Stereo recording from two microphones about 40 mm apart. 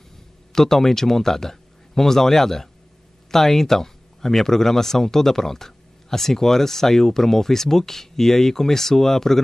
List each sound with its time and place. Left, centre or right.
0.5 s speech: centre